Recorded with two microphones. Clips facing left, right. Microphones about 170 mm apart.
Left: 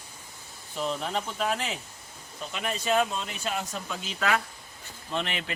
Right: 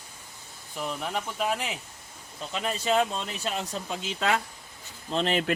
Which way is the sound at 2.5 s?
25° right (ahead or behind).